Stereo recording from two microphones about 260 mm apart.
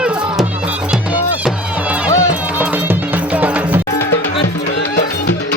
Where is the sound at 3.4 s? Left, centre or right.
Centre.